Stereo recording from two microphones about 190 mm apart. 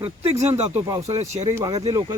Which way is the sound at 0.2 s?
35° right (ahead or behind).